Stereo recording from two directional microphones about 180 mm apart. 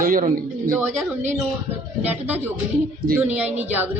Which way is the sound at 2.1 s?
10° right (ahead or behind).